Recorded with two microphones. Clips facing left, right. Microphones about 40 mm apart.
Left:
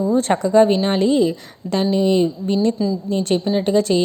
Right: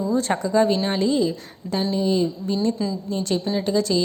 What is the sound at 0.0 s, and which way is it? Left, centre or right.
A woman's voice, left.